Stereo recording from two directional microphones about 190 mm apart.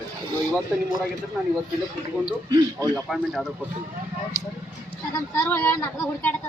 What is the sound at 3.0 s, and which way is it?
Speech, centre (ahead or behind).